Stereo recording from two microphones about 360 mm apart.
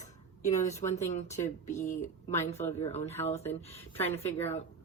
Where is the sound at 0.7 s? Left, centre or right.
Centre.